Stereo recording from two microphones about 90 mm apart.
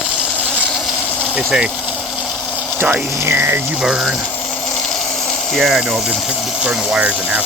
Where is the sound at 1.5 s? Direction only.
10° right (ahead or behind).